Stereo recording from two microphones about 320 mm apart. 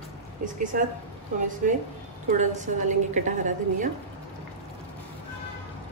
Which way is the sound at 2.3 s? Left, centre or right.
Right.